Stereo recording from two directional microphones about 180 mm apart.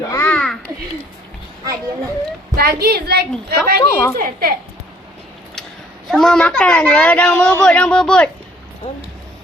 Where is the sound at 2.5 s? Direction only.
60° right (ahead or behind).